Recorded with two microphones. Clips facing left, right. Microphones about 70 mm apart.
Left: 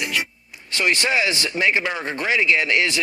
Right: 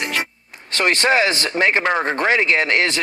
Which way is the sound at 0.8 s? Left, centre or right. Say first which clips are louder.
Right 4 dB; right.